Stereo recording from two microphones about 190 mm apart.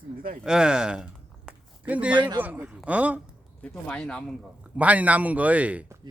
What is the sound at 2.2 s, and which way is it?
Speech, 25° right (ahead or behind).